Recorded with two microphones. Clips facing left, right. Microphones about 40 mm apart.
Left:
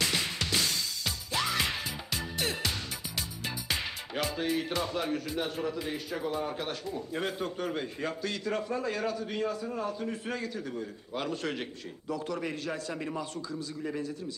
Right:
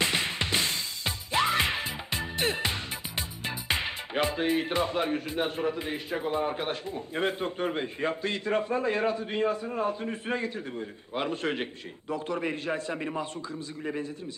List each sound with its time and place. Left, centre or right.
0.0 s music: right